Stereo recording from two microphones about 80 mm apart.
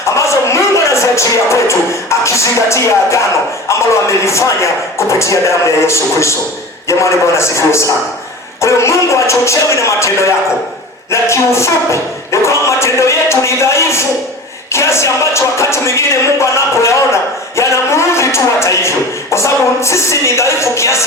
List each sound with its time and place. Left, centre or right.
0.1 s speech: left
4.2 s speech: left